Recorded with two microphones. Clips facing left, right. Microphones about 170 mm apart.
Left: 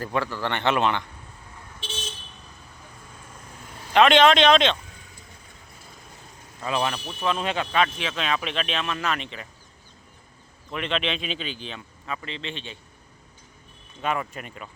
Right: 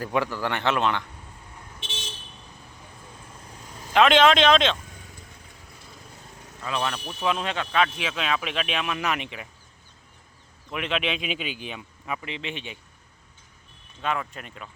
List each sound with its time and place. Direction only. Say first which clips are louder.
0.0 s speech: right 1 dB; 10° right (ahead or behind)
3.9 s speech: left 1 dB; centre (ahead or behind)
6.7 s speech: left 3 dB; 20° left (ahead or behind)
6.9 s speech: even; 5° left (ahead or behind); by 9.5 s 10° right (ahead or behind)
10.7 s speech: even; 5° right (ahead or behind)
14.0 s speech: left 1 dB; 5° left (ahead or behind)